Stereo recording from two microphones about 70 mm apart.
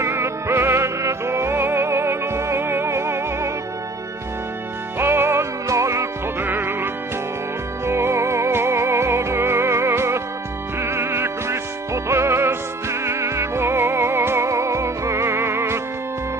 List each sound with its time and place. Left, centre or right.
0.0 s music: right
4.9 s music: right
5.7 s music: right
6.4 s music: right